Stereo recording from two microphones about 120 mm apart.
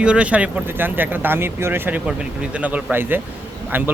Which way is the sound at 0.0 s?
10° right (ahead or behind).